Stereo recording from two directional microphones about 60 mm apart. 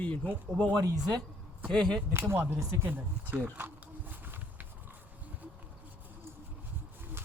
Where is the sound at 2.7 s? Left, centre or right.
Right.